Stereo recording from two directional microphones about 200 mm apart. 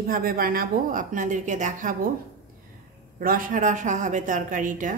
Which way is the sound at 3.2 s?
45° right (ahead or behind).